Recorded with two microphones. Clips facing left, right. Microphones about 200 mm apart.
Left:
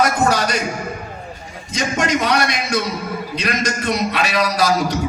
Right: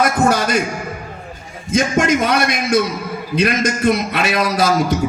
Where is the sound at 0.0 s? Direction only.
50° right (ahead or behind).